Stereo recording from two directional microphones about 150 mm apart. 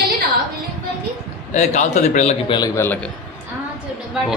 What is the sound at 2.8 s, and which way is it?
Speech, 10° left (ahead or behind).